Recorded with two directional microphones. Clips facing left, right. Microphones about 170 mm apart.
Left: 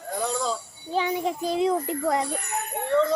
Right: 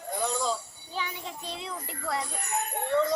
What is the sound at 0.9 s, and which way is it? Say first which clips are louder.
A child's voice: left 11 dB; 40° left (ahead or behind).